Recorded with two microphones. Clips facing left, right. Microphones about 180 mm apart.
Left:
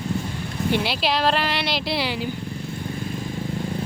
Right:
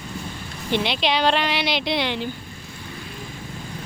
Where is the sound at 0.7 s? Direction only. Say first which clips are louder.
Right 2 dB; 5° left (ahead or behind).